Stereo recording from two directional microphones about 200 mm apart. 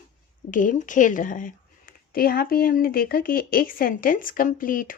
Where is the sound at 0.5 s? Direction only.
40° left (ahead or behind).